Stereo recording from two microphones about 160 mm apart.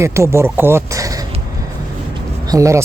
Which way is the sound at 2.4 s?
20° right (ahead or behind).